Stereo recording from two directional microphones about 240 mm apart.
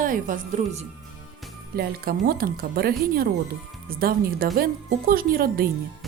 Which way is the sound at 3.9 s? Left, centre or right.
Right.